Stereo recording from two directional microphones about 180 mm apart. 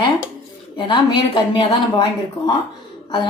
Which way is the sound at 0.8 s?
25° left (ahead or behind).